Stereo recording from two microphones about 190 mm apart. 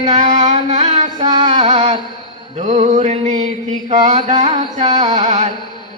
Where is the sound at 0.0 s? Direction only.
40° right (ahead or behind).